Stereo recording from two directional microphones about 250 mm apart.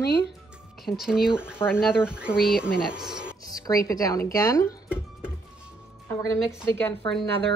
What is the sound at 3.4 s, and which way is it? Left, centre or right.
Speech, centre.